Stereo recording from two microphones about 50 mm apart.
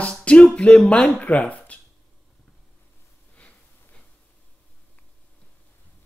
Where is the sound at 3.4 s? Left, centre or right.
Left.